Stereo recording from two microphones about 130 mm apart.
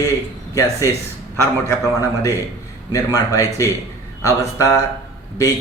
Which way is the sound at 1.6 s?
25° left (ahead or behind).